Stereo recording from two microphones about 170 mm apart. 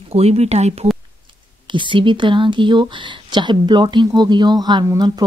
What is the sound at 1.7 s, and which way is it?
Speech, 30° right (ahead or behind).